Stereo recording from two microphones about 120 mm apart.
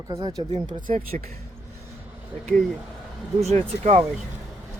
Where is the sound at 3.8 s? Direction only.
55° right (ahead or behind).